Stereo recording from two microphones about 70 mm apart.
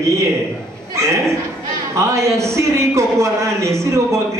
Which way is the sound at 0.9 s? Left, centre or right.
Right.